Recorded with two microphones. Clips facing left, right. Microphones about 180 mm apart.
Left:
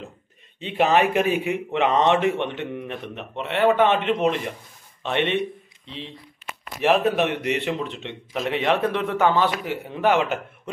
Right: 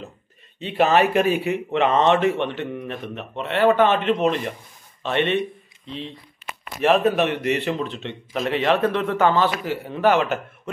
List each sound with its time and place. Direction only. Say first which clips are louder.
0.6 s a man's voice: right 1 dB; 15° left (ahead or behind)
6.8 s a man's voice: right 2 dB; 15° left (ahead or behind)